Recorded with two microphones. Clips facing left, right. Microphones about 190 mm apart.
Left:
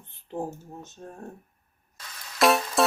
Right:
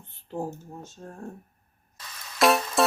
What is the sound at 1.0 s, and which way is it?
Speech, 5° left (ahead or behind).